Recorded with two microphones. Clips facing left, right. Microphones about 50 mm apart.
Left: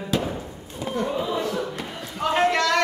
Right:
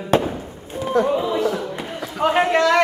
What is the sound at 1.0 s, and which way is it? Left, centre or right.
Speech, right.